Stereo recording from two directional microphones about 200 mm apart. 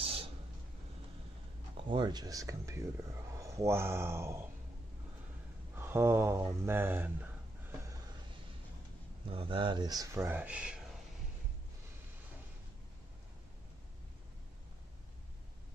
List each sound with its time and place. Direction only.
0.0 s a sound: 30° right (ahead or behind)
1.9 s speech: 20° right (ahead or behind)
5.8 s speech: 10° right (ahead or behind)
9.3 s speech: 25° right (ahead or behind); by 10.8 s 5° right (ahead or behind)